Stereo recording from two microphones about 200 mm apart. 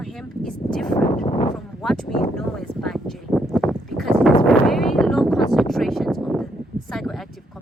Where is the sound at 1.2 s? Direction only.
30° left (ahead or behind).